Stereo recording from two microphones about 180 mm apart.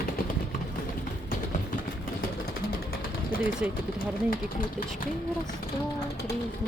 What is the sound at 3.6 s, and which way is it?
Speech, 10° right (ahead or behind).